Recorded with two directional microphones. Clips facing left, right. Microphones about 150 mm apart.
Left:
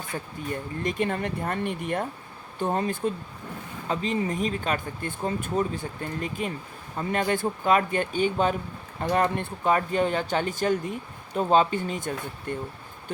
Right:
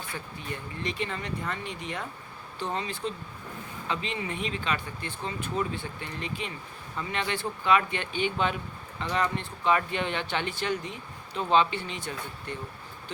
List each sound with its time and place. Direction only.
0.1 s speech: 45° left (ahead or behind)
9.7 s speech: 40° left (ahead or behind)